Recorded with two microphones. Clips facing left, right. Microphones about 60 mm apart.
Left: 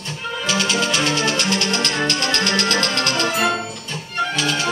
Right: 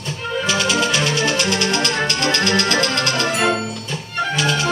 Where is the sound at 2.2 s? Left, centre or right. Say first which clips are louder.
Right 2 dB; right.